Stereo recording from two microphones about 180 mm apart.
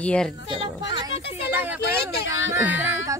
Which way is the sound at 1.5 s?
10° right (ahead or behind).